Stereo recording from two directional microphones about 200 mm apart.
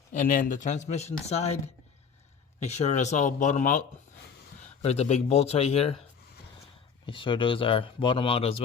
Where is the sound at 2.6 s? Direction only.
35° left (ahead or behind).